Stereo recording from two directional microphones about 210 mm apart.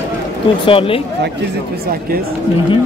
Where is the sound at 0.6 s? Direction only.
25° left (ahead or behind).